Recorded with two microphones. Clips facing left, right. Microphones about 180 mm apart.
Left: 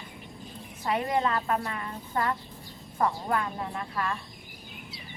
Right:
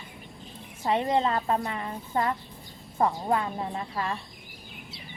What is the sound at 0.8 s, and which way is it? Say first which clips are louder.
Speech: right 2 dB; 25° right (ahead or behind).